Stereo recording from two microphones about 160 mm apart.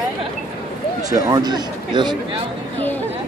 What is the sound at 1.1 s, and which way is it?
Speech, 25° right (ahead or behind).